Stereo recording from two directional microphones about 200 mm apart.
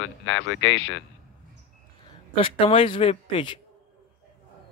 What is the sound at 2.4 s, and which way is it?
Speech, 25° left (ahead or behind).